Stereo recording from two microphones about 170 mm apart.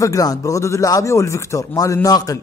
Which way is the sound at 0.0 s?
20° left (ahead or behind).